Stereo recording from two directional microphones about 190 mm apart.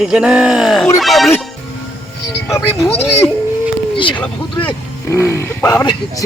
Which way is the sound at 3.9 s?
25° left (ahead or behind).